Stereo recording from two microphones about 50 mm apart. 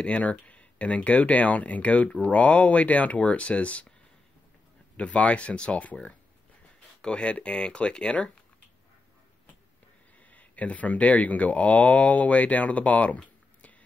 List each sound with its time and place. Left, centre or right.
0.0 s speech: left
4.9 s speech: left
10.3 s speech: left